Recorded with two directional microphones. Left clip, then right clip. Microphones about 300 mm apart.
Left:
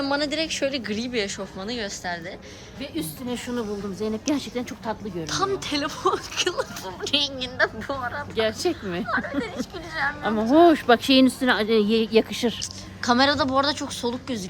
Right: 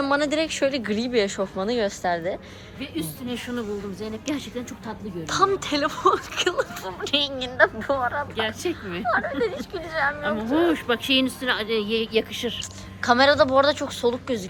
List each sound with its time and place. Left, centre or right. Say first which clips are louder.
0.0 s speech: right 3 dB; centre
2.9 s a woman's voice: even; left
5.3 s speech: right 4 dB; centre
8.4 s a woman's voice: left 3 dB; left
9.0 s speech: right 5 dB; centre
10.2 s speech: left 5 dB; left
13.0 s speech: right 3 dB; centre